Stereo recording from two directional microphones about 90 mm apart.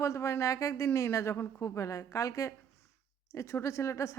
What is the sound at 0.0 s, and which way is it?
A woman's voice, 35° left (ahead or behind).